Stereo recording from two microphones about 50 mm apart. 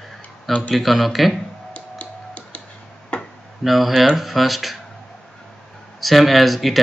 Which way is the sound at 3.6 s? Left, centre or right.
Centre.